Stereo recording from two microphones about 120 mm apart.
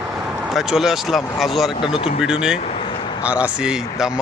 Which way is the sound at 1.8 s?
45° left (ahead or behind).